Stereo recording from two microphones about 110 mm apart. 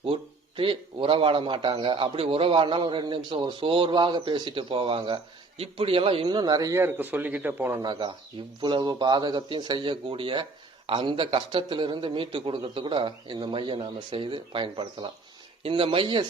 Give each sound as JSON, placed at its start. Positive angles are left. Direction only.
{"t": 0.0, "sound": "a man's voice", "side_deg": -55}
{"t": 7.8, "sound": "a man's voice", "side_deg": -40}
{"t": 15.6, "sound": "a man's voice", "side_deg": -55}